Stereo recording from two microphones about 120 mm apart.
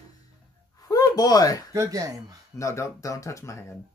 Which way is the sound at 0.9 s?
30° left (ahead or behind).